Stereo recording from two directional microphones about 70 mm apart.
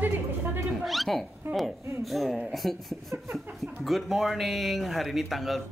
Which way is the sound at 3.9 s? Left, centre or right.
Centre.